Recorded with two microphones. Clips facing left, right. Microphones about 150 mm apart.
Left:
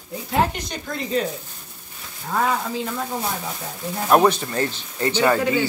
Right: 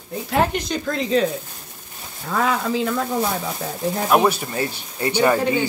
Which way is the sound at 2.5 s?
90° right.